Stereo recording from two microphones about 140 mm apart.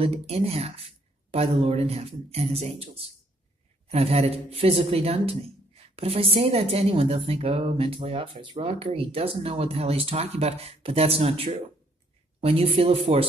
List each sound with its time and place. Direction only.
0.0 s a woman's voice: 45° right (ahead or behind)